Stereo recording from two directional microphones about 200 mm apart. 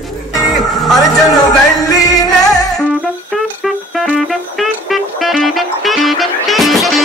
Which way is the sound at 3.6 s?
Centre (ahead or behind).